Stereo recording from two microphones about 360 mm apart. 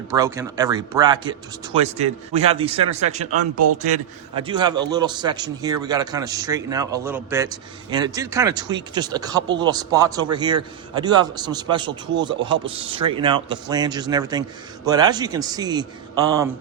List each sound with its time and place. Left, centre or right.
0.1 s a man's voice: centre
2.3 s a man's voice: centre
3.6 s a man's voice: right
4.4 s a man's voice: centre